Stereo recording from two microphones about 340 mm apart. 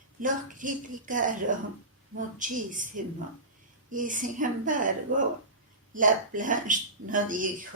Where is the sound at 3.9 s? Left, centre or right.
Right.